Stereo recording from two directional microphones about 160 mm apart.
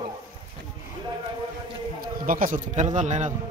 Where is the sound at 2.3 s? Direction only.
60° right (ahead or behind).